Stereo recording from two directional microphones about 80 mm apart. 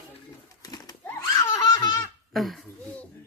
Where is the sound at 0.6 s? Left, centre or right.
Left.